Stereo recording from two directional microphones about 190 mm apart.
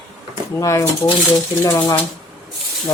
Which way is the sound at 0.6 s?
15° left (ahead or behind).